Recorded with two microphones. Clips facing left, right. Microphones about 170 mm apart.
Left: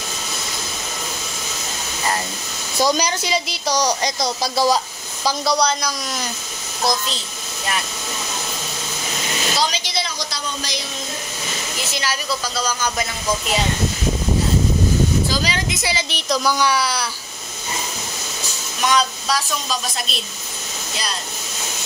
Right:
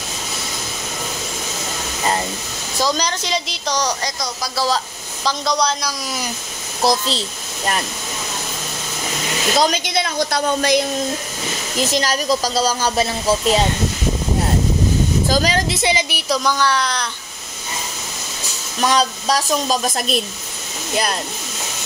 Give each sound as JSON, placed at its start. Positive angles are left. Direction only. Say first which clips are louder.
{"t": 2.8, "sound": "a woman's voice", "louder": "left 2 dB", "side_deg": 10}
{"t": 5.2, "sound": "a woman's voice", "louder": "left 1 dB", "side_deg": 5}
{"t": 6.8, "sound": "a child's voice", "louder": "right 4 dB", "side_deg": -30}
{"t": 9.6, "sound": "a woman's voice", "louder": "right 7 dB", "side_deg": -50}
{"t": 11.9, "sound": "speech", "louder": "right 6 dB", "side_deg": -40}
{"t": 15.2, "sound": "speech", "louder": "right 5 dB", "side_deg": -45}
{"t": 15.7, "sound": "speech", "louder": "right 5 dB", "side_deg": -20}
{"t": 16.4, "sound": "a woman's voice", "louder": "left 1 dB", "side_deg": 10}
{"t": 18.8, "sound": "a woman's voice", "louder": "right 2 dB", "side_deg": -35}